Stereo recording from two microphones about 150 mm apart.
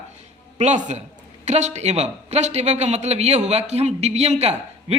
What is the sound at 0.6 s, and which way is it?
A man's voice, 50° right (ahead or behind).